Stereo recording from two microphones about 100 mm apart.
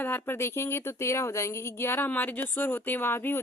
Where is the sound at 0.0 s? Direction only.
20° left (ahead or behind).